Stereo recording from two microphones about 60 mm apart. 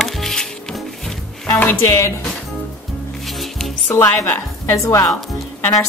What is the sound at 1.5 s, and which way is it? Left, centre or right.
Speech, left.